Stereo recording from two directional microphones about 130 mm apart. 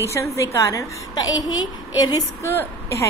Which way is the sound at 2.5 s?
20° left (ahead or behind).